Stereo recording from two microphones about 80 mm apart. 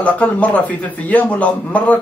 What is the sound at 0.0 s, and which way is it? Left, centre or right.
Speech, centre.